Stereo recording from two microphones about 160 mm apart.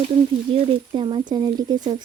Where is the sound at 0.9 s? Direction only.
30° right (ahead or behind).